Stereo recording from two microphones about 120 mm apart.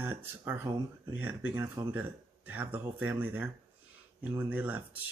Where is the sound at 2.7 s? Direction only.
15° right (ahead or behind).